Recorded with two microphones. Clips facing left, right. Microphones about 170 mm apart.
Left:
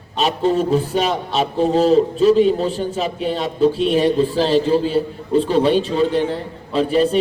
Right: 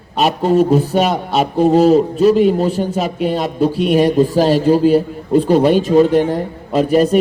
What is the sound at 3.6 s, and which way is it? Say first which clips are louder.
Speech: even; 15° right (ahead or behind).